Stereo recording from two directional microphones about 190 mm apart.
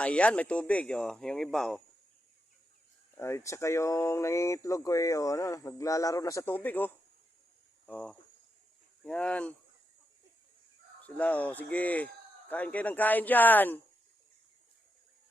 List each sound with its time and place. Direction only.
0.0 s speech: 5° left (ahead or behind)
3.2 s speech: 15° left (ahead or behind)
11.0 s speech: 10° left (ahead or behind)